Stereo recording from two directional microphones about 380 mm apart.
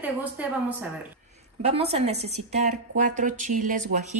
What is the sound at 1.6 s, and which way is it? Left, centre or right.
A woman's voice, centre.